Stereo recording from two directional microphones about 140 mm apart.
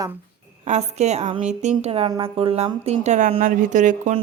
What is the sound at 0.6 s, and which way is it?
Speech, 55° right (ahead or behind).